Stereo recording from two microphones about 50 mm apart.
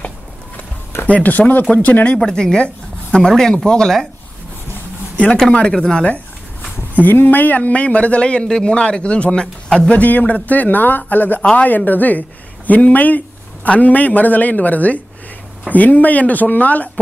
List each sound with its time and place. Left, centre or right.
1.0 s speech: left
2.1 s speech: centre
5.1 s a sound: left
5.7 s speech: centre
7.0 s speech: left
10.0 s speech: left